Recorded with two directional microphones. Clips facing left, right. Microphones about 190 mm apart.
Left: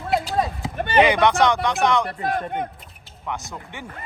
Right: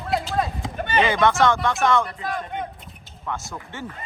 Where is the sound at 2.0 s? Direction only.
55° left (ahead or behind).